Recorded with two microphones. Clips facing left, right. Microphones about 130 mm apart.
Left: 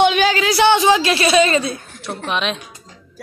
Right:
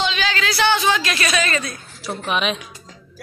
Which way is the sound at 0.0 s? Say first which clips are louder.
Left 9 dB; 55° left (ahead or behind).